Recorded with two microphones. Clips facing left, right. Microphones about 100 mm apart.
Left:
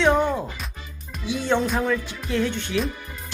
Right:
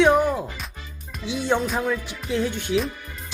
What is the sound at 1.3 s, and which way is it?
Speech, 15° right (ahead or behind).